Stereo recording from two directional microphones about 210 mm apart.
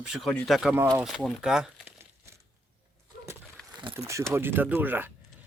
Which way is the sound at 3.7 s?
20° right (ahead or behind).